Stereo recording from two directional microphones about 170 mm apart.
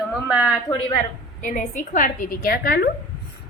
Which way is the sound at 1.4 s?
50° left (ahead or behind).